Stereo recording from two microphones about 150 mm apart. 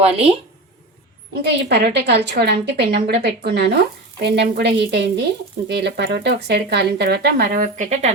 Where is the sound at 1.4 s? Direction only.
90° right.